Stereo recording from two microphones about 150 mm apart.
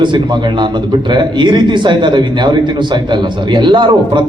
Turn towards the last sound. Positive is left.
turn(degrees=-30)  # may be behind; listen again after turning